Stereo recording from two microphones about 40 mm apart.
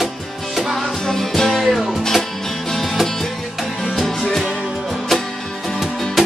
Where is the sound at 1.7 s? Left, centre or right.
Centre.